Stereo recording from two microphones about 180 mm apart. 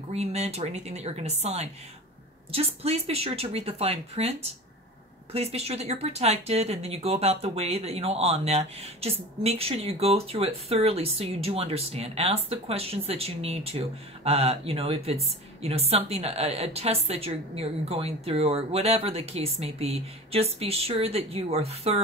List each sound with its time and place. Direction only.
0.1 s speech: 35° right (ahead or behind)